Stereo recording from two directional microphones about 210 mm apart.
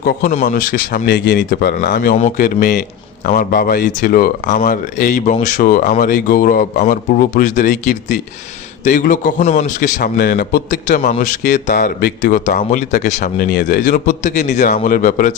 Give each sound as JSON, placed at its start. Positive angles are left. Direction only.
{"t": 0.0, "sound": "a man's voice", "side_deg": 45}
{"t": 8.8, "sound": "a man's voice", "side_deg": 35}